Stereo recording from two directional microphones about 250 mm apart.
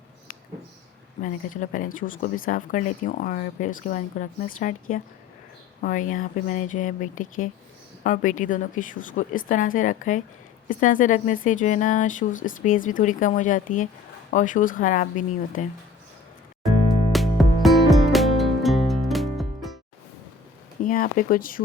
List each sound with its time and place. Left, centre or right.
1.2 s speech: left
16.6 s music: centre
20.8 s speech: left